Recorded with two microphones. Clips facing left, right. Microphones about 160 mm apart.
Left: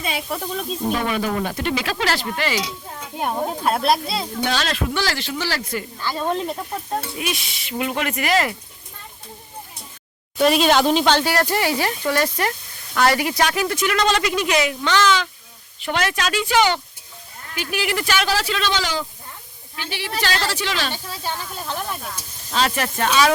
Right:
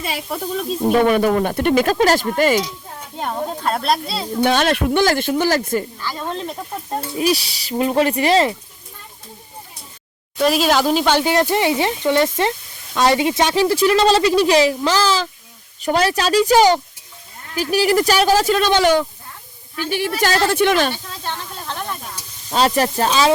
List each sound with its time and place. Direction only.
0.0 s speech: centre (ahead or behind)
0.9 s speech: 50° right (ahead or behind)
3.2 s speech: 10° left (ahead or behind)
4.4 s speech: 55° right (ahead or behind)
6.0 s speech: 15° left (ahead or behind)
7.2 s speech: 35° right (ahead or behind)
10.3 s speech: centre (ahead or behind)
11.3 s speech: 20° right (ahead or behind); by 19.0 s 60° right (ahead or behind)
19.8 s speech: 45° right (ahead or behind)
20.9 s speech: 5° left (ahead or behind)
22.5 s speech: 35° right (ahead or behind)